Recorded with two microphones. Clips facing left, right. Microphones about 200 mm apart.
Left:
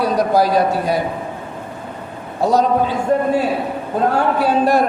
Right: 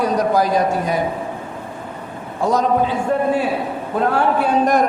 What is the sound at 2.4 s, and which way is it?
Speech, 35° left (ahead or behind).